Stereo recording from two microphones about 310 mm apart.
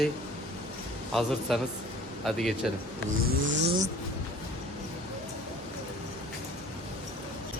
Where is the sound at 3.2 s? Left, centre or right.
Right.